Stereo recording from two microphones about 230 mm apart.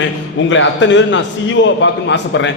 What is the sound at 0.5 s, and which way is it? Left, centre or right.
A man's voice, left.